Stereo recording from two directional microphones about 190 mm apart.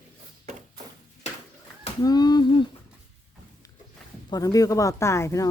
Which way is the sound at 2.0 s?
20° left (ahead or behind).